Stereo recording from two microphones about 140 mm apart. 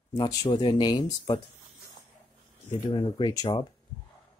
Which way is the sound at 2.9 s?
35° left (ahead or behind).